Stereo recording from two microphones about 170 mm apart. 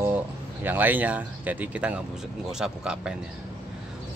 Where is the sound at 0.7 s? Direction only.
10° right (ahead or behind).